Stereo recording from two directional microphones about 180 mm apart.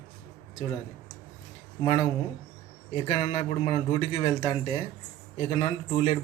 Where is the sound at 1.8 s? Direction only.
30° left (ahead or behind).